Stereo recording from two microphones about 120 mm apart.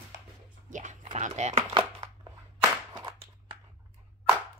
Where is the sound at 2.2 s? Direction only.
30° right (ahead or behind).